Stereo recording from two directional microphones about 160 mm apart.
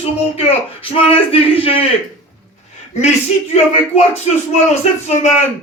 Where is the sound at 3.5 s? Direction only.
45° left (ahead or behind).